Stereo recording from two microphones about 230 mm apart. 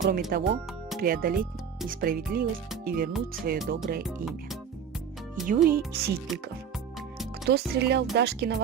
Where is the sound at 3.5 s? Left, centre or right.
Right.